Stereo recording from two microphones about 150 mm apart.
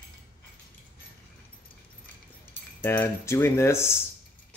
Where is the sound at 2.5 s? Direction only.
10° left (ahead or behind).